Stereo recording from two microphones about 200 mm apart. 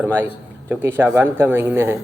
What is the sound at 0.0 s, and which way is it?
Speech, 10° right (ahead or behind).